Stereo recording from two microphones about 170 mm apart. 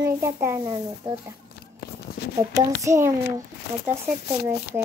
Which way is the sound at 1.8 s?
70° left (ahead or behind).